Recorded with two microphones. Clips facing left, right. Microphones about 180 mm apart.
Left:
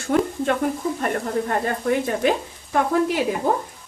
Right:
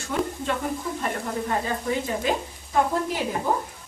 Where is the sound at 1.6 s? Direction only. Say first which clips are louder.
Left 5 dB; 60° left (ahead or behind).